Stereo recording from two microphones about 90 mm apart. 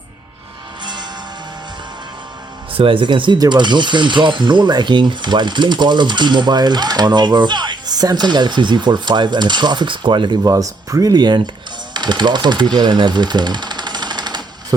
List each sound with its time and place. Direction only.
2.7 s speech: 80° right; by 10.5 s 55° right (ahead or behind)
10.5 s speech: 40° right (ahead or behind); by 12.6 s 55° right (ahead or behind)
12.7 s jackhammer: 55° right (ahead or behind)